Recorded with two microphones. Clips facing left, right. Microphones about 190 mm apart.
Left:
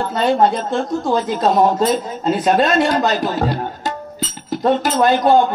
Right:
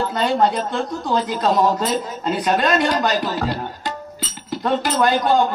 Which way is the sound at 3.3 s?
50° left (ahead or behind).